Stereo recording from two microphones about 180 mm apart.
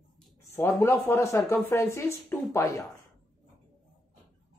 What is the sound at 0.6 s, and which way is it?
A woman's voice, 15° left (ahead or behind).